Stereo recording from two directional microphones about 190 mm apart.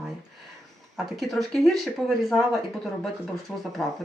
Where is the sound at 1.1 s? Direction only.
Centre (ahead or behind).